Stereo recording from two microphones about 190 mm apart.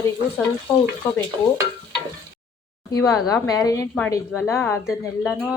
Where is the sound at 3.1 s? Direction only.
20° left (ahead or behind).